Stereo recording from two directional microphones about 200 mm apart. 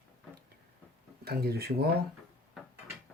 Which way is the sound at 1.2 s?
50° right (ahead or behind).